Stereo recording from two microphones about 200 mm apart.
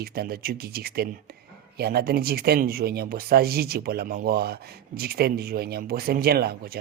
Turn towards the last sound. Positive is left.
turn(degrees=-50)  # may be behind; listen again after turning